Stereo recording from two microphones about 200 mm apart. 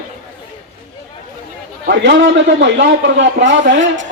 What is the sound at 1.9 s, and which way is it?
Speech, 60° right (ahead or behind).